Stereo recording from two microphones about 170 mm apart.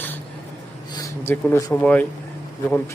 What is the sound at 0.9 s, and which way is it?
A man's voice, 15° left (ahead or behind).